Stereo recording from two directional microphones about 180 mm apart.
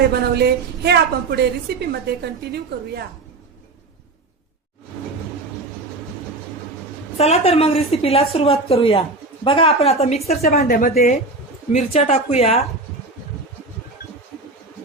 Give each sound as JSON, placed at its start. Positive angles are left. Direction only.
{"t": 0.1, "sound": "a woman's voice", "side_deg": -65}
{"t": 7.2, "sound": "a woman's voice", "side_deg": 35}
{"t": 10.5, "sound": "a woman's voice", "side_deg": 55}
{"t": 11.7, "sound": "a woman's voice", "side_deg": 35}